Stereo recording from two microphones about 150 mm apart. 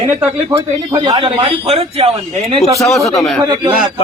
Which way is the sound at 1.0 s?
35° right (ahead or behind).